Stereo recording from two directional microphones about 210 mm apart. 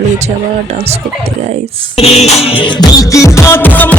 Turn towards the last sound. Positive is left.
turn(degrees=10)  # may be behind; listen again after turning